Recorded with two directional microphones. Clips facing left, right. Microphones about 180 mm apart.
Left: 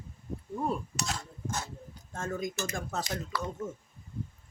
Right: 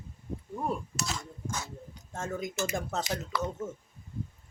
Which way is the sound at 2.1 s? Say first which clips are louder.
Even; 20° right (ahead or behind).